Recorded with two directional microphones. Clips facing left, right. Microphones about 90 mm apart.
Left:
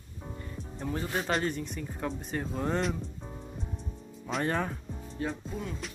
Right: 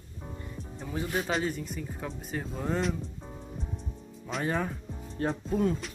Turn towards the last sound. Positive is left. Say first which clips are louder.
# right 7 dB
turn(degrees=-40)  # may be behind; listen again after turning